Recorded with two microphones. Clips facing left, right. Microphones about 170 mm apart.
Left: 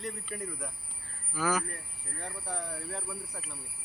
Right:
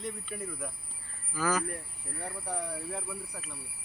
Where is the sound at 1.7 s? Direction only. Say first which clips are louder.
Right 4 dB; 10° right (ahead or behind).